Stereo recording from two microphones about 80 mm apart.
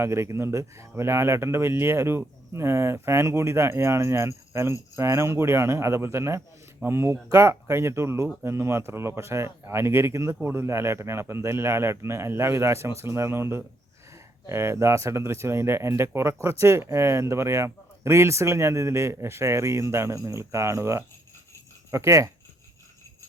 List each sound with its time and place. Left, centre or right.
0.0 s speech: right